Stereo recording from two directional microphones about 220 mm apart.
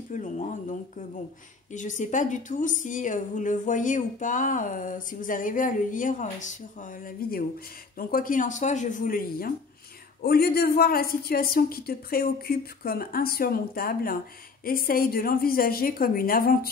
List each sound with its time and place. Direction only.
0.1 s a woman's voice: 35° left (ahead or behind)